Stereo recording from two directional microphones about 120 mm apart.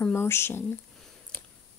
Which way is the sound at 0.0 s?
20° left (ahead or behind).